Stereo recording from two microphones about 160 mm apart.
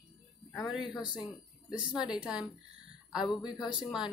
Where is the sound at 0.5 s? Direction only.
Centre (ahead or behind).